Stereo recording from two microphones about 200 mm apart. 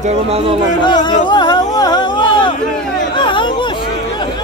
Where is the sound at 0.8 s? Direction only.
20° left (ahead or behind).